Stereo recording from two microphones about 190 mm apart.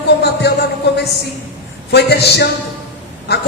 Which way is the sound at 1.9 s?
60° left (ahead or behind).